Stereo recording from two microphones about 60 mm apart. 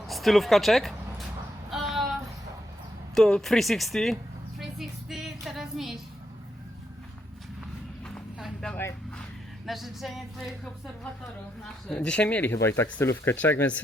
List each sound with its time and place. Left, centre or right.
0.1 s speech: centre
1.7 s a sound: centre
3.2 s speech: centre
4.6 s music: centre
8.7 s speech: left
9.6 s speech: centre
11.9 s speech: centre
12.5 s speech: left
13.4 s speech: left